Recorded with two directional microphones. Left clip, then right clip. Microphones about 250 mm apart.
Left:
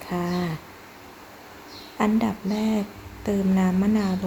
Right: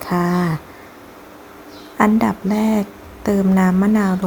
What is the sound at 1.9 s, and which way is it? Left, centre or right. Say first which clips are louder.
Speech: right 8 dB; centre.